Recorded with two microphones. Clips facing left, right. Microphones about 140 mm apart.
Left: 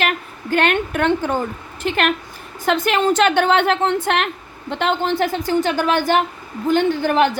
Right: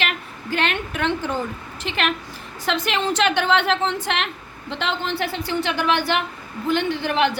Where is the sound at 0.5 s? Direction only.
50° left (ahead or behind).